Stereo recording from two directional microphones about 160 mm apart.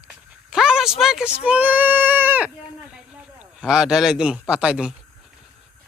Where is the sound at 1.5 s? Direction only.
10° right (ahead or behind).